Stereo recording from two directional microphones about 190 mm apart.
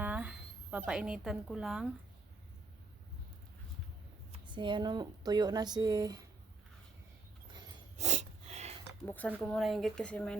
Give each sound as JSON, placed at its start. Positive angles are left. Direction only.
{"t": 0.0, "sound": "a woman's voice", "side_deg": -5}
{"t": 4.3, "sound": "speech", "side_deg": -25}
{"t": 7.9, "sound": "a sound", "side_deg": -35}
{"t": 9.0, "sound": "speech", "side_deg": 10}